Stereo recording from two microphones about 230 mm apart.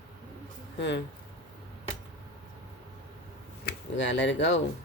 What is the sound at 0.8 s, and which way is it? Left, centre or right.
Speech, left.